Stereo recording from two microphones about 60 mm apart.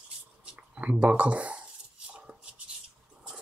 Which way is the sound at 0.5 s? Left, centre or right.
Right.